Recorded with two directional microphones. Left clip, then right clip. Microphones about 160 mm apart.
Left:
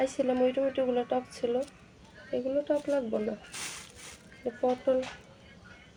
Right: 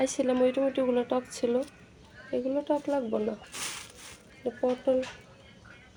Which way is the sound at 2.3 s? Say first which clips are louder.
Even; 15° right (ahead or behind).